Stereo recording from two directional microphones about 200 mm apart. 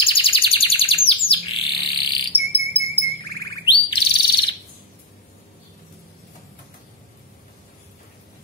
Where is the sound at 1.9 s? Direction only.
50° right (ahead or behind).